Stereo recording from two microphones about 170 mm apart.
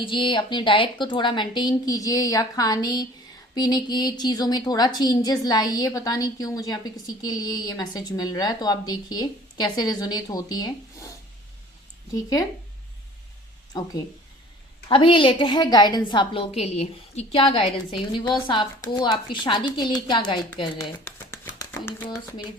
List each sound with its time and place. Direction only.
0.0 s a woman's voice: 30° left (ahead or behind)
12.1 s a woman's voice: 20° left (ahead or behind)
14.8 s a woman's voice: 30° left (ahead or behind)
21.0 s a sound: 15° left (ahead or behind)